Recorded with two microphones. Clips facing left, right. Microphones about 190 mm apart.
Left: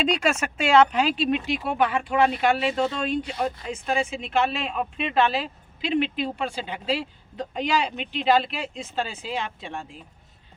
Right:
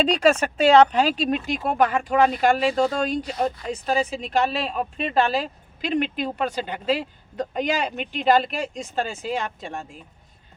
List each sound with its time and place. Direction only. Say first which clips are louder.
0.0 s speech: right 5 dB; 35° right (ahead or behind)